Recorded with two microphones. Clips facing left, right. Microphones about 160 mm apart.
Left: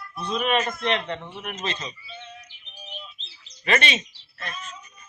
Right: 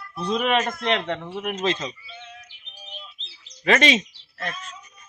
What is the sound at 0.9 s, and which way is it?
Speech, 90° right.